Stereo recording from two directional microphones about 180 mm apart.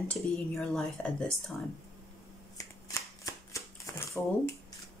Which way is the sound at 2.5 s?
20° left (ahead or behind).